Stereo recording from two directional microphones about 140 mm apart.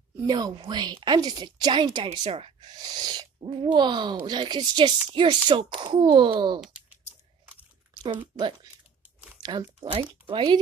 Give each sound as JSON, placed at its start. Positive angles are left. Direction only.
{"t": 0.3, "sound": "speech", "side_deg": -30}
{"t": 6.6, "sound": "typing", "side_deg": -10}
{"t": 7.9, "sound": "a sound", "side_deg": -30}
{"t": 9.4, "sound": "speech", "side_deg": -30}